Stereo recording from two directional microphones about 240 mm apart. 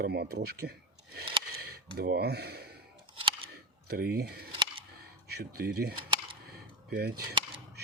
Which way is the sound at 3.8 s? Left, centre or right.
Right.